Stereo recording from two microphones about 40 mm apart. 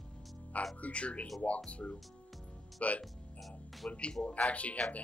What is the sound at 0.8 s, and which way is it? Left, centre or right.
Speech, left.